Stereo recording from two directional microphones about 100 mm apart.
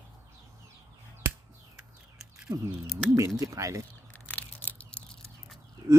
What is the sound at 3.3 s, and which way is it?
Speech, 35° right (ahead or behind).